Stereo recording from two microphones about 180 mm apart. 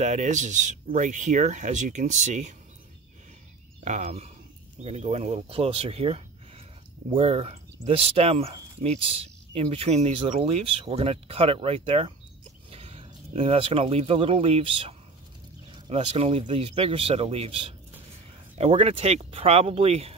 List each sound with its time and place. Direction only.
0.0 s speech: 40° right (ahead or behind)
3.8 s speech: 40° right (ahead or behind)